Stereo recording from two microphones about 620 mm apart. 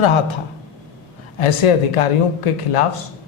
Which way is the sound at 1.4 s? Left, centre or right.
Left.